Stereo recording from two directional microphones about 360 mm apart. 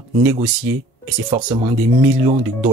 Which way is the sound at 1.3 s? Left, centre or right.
Centre.